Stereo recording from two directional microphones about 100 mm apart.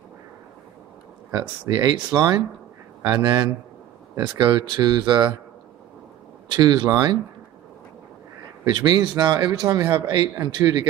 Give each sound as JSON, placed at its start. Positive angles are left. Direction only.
{"t": 1.3, "sound": "speech", "side_deg": -45}
{"t": 6.5, "sound": "speech", "side_deg": -45}
{"t": 8.6, "sound": "speech", "side_deg": -45}